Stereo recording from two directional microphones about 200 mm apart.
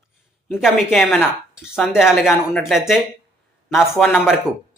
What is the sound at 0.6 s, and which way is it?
Speech, centre (ahead or behind).